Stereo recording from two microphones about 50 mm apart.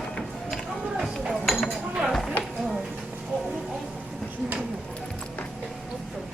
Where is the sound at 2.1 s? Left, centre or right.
Centre.